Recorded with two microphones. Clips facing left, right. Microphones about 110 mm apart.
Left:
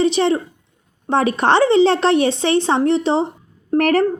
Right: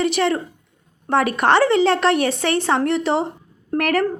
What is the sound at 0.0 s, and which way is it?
A woman's voice, 25° left (ahead or behind).